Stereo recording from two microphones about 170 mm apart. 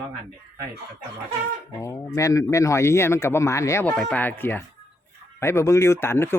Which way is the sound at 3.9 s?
5° left (ahead or behind).